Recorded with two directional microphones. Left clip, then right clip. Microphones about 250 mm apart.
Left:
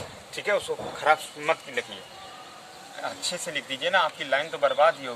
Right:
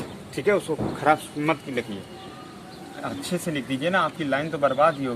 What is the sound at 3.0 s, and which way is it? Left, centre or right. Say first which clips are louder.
Speech: right 1 dB; centre.